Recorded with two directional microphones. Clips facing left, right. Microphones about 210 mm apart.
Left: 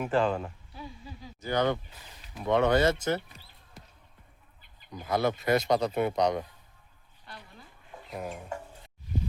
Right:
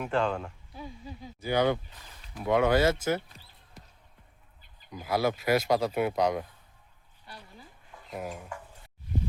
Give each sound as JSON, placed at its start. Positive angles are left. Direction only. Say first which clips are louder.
{"t": 0.0, "sound": "speech", "louder": "left 2 dB", "side_deg": 5}
{"t": 0.8, "sound": "a sound", "louder": "right 2 dB", "side_deg": -15}
{"t": 2.4, "sound": "speech", "louder": "even", "side_deg": -5}
{"t": 4.9, "sound": "speech", "louder": "even", "side_deg": -5}
{"t": 8.1, "sound": "speech", "louder": "even", "side_deg": -5}
{"t": 8.4, "sound": "a sound", "louder": "left 4 dB", "side_deg": 25}